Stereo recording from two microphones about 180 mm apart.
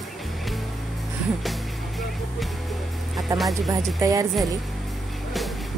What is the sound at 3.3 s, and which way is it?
Speech, 15° right (ahead or behind).